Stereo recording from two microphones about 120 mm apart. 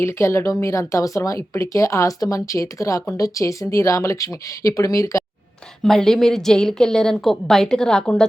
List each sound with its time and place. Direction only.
0.0 s speech: 20° left (ahead or behind)
5.8 s a woman's voice: 5° left (ahead or behind)